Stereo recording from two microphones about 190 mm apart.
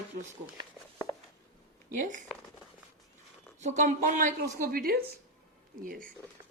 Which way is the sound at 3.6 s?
40° right (ahead or behind).